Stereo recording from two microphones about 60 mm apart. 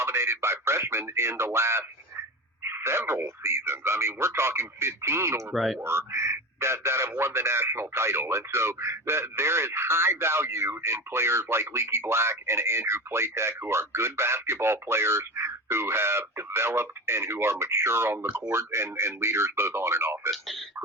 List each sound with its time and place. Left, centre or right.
0.0 s speech: right
5.5 s speech: centre
5.8 s speech: right
20.3 s speech: centre